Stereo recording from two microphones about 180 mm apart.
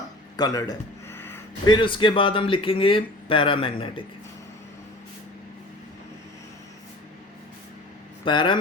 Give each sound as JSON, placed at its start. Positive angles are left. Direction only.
{"t": 0.3, "sound": "a sound", "side_deg": 20}
{"t": 1.6, "sound": "speech", "side_deg": 25}
{"t": 8.2, "sound": "speech", "side_deg": 25}